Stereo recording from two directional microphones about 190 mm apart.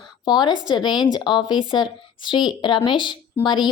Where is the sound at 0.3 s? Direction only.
20° left (ahead or behind).